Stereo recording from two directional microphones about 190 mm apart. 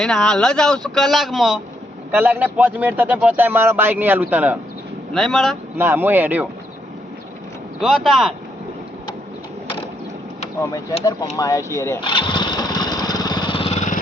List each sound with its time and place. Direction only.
0.0 s a man's voice: 5° left (ahead or behind)
5.1 s speech: 5° left (ahead or behind)
5.7 s a man's voice: 10° right (ahead or behind)
7.8 s speech: centre (ahead or behind)
11.3 s speech: 20° left (ahead or behind)
12.0 s lawn mower: 25° left (ahead or behind)